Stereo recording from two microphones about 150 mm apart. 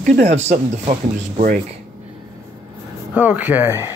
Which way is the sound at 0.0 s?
50° right (ahead or behind).